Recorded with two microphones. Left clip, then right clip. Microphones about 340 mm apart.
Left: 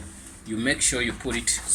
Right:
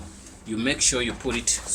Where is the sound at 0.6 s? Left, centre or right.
Centre.